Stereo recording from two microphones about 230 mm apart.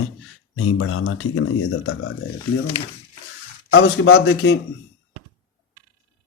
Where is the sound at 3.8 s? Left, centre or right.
Left.